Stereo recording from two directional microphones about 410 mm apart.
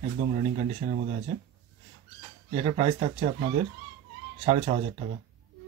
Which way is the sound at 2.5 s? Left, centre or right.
Centre.